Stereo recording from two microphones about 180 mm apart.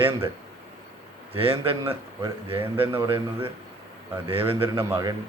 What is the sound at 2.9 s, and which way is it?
A man's voice, 30° right (ahead or behind).